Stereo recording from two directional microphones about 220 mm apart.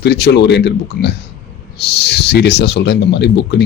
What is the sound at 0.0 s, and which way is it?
Speech, 50° left (ahead or behind).